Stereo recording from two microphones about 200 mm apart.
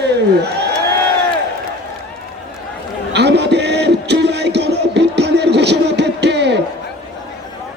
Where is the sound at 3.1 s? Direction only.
55° right (ahead or behind).